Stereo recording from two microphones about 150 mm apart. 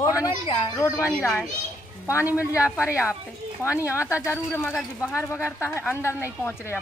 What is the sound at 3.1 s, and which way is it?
Speech, 20° left (ahead or behind).